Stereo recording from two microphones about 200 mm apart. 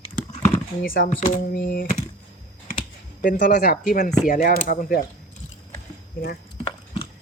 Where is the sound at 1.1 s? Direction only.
40° left (ahead or behind).